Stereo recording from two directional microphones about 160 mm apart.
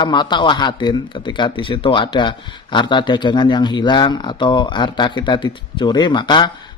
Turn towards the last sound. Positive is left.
turn(degrees=30)  # may be behind; listen again after turning